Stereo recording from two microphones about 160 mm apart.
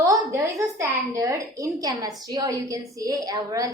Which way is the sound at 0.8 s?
20° right (ahead or behind).